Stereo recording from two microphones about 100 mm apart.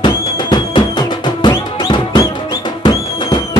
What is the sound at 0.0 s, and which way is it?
Music, 50° left (ahead or behind).